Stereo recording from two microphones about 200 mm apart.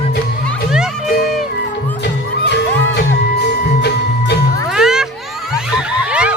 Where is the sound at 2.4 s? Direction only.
55° left (ahead or behind).